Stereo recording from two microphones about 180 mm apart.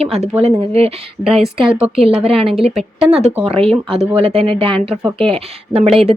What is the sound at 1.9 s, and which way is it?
Speech, 30° right (ahead or behind).